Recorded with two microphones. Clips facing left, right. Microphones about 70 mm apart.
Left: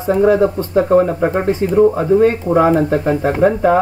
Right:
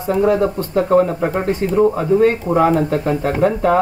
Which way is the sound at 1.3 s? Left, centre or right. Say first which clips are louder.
Left 3 dB; left.